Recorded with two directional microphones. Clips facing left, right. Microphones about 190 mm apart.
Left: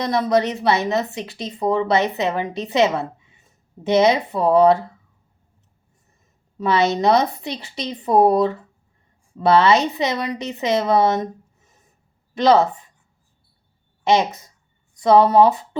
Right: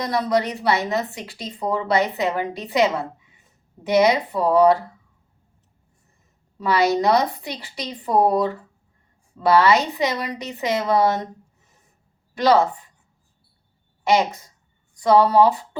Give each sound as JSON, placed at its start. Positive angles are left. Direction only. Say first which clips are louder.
{"t": 0.0, "sound": "speech", "louder": "left 3 dB", "side_deg": 20}
{"t": 6.6, "sound": "speech", "louder": "left 1 dB", "side_deg": 25}
{"t": 12.3, "sound": "speech", "louder": "left 2 dB", "side_deg": 20}
{"t": 14.0, "sound": "speech", "louder": "left 1 dB", "side_deg": 20}